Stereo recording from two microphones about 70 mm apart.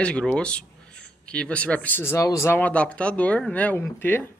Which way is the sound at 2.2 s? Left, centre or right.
Left.